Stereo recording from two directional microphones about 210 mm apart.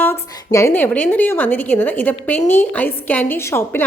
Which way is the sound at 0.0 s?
10° left (ahead or behind).